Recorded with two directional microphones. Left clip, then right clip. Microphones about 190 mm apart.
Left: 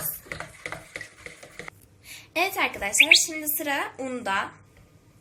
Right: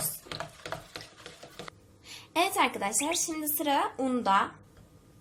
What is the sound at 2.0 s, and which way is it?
A woman's voice, 50° right (ahead or behind).